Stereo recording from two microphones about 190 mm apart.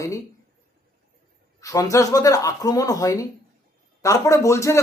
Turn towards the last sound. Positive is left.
turn(degrees=15)  # may be behind; listen again after turning